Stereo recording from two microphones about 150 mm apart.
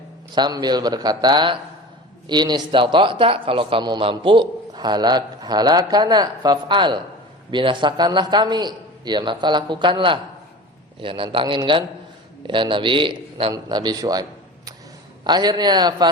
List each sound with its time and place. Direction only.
0.3 s speech: 30° right (ahead or behind)